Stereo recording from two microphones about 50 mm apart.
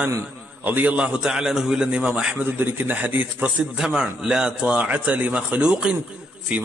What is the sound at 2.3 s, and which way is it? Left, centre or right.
Speech, right.